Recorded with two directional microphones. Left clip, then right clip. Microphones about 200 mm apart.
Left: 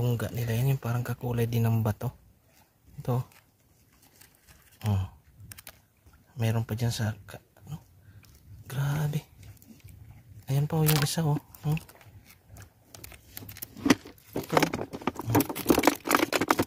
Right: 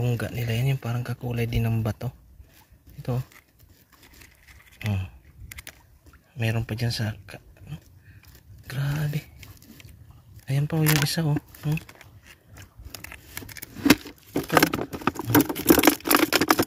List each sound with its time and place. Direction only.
0.0 s speech: 5° left (ahead or behind)
4.7 s a sound: 15° left (ahead or behind)
6.3 s speech: 10° left (ahead or behind)
8.6 s speech: 10° left (ahead or behind)
10.4 s speech: 10° left (ahead or behind)
13.8 s a sound: 35° right (ahead or behind)